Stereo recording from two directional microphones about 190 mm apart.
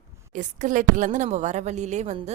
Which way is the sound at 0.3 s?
40° right (ahead or behind).